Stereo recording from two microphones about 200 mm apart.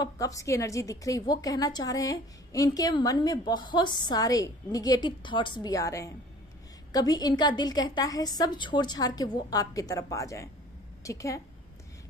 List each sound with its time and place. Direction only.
0.0 s a woman's voice: 15° left (ahead or behind)